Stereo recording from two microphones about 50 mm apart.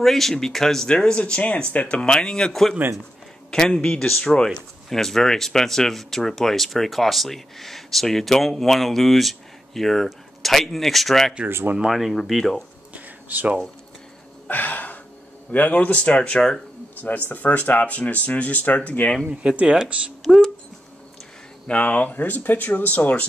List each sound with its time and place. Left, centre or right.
0.0 s speech: centre; by 2.0 s left
2.0 s speech: centre
2.8 s speech: right
3.4 s speech: centre
11.4 s speech: right
11.8 s speech: centre
12.9 s a sound: right
14.5 s gasp: left
15.5 s speech: left; by 16.6 s centre
17.3 s speech: left
19.2 s speech: right
21.6 s speech: left